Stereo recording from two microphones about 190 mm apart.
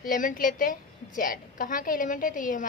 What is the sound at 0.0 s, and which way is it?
A woman's voice, 45° left (ahead or behind).